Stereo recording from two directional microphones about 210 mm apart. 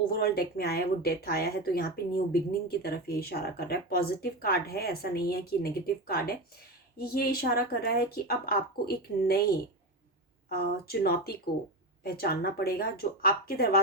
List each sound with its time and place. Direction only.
0.1 s speech: 45° left (ahead or behind)